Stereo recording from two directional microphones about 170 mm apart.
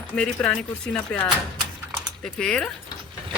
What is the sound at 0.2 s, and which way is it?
Speech, 5° left (ahead or behind).